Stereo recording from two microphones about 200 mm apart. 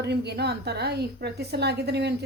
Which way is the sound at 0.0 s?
55° right (ahead or behind).